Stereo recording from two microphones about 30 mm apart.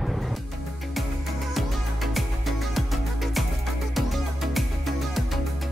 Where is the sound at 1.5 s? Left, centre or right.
Centre.